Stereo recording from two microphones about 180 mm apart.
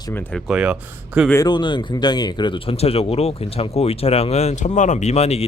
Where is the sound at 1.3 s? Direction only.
20° left (ahead or behind).